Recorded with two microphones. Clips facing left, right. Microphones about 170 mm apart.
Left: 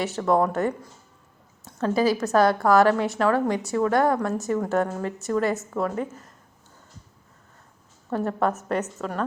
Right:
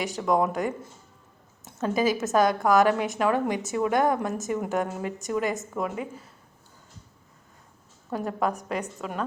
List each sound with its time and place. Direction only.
0.2 s a woman's voice: 10° right (ahead or behind)
8.1 s a woman's voice: 10° right (ahead or behind)
9.0 s a woman's voice: centre (ahead or behind)